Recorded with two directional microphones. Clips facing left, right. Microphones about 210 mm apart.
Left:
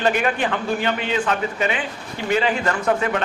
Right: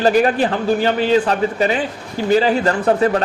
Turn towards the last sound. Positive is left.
turn(degrees=-35)  # may be behind; listen again after turning